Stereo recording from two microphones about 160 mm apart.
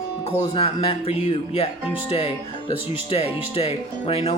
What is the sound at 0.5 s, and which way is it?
Speech, 35° left (ahead or behind).